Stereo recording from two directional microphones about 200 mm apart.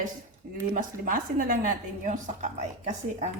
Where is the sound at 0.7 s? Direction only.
40° right (ahead or behind).